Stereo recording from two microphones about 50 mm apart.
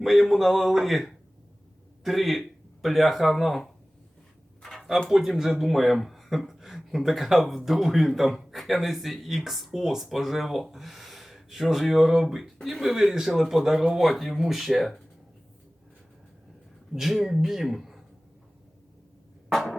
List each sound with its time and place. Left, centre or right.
0.0 s speech: centre
4.6 s a sound: centre
5.0 s speech: centre
16.9 s speech: centre